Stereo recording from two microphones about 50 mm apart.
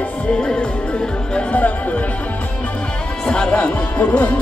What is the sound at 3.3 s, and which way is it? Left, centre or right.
Music, centre.